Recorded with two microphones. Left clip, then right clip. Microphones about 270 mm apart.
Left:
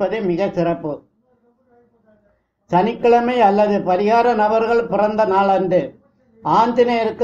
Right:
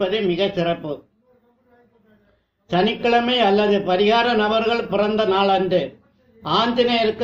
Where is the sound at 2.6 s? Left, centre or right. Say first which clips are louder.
Left 4 dB; centre.